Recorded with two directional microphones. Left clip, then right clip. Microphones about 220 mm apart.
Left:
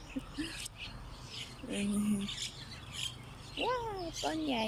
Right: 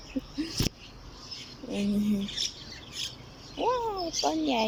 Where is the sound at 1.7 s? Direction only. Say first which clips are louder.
Right 6 dB; 20° right (ahead or behind).